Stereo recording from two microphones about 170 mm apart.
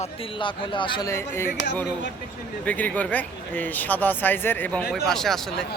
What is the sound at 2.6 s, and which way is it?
Speech, 10° left (ahead or behind).